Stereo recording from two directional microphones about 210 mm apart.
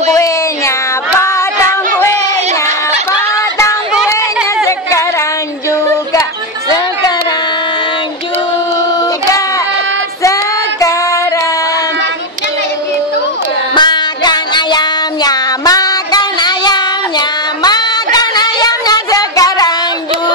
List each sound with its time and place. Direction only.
0.1 s child singing: 15° left (ahead or behind)
3.9 s a sound: 5° right (ahead or behind)
13.7 s child singing: 20° left (ahead or behind)
17.6 s music: 20° left (ahead or behind)